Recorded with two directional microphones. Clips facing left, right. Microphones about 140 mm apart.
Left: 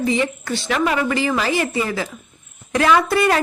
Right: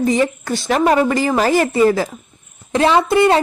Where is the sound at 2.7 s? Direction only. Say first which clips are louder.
Right 3 dB; 25° right (ahead or behind).